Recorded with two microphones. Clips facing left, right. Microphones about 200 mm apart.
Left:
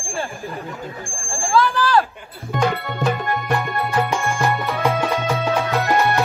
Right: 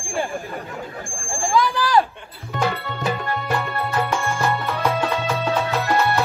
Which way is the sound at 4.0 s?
15° left (ahead or behind).